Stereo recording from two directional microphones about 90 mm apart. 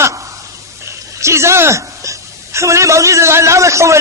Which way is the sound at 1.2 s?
30° right (ahead or behind).